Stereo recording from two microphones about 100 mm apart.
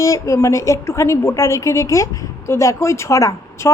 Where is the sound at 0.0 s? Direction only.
35° left (ahead or behind).